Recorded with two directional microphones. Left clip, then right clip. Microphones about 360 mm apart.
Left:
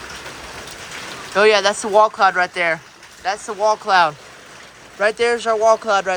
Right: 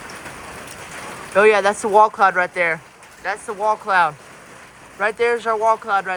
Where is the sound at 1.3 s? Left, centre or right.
Centre.